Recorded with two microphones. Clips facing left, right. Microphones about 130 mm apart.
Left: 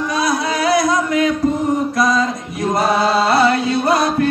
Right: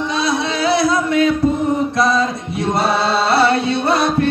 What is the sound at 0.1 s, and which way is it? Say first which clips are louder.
Music: left 2 dB; 25° right (ahead or behind).